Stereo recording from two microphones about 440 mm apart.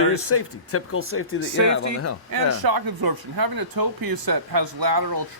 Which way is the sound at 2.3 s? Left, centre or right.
Right.